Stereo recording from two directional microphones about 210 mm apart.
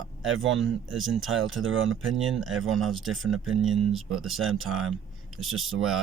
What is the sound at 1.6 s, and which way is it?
Speech, 70° right (ahead or behind).